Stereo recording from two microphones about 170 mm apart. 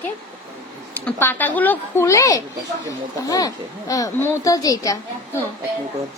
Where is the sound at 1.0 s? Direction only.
10° left (ahead or behind).